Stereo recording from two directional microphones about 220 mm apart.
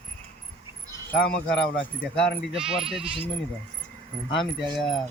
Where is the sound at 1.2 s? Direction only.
5° left (ahead or behind).